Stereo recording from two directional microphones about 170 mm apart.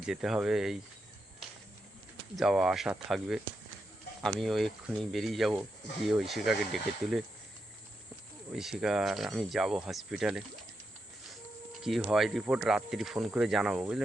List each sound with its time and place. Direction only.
0.0 s speech: 5° right (ahead or behind)
2.3 s speech: 5° right (ahead or behind)
8.5 s speech: 5° right (ahead or behind)
11.8 s speech: centre (ahead or behind)